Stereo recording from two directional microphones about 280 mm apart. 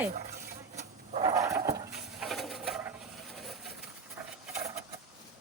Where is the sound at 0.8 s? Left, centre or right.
Right.